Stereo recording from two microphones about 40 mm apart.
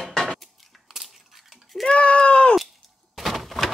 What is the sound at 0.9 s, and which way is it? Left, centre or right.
Crushing, centre.